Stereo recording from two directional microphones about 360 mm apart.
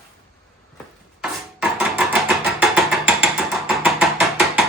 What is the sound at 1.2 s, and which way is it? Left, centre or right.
Music, centre.